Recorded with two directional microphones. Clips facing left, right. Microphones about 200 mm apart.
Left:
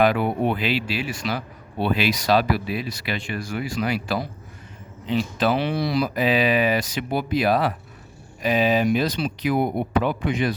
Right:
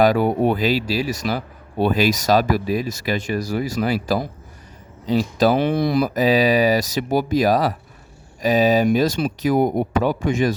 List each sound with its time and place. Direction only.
0.0 s speech: 40° right (ahead or behind)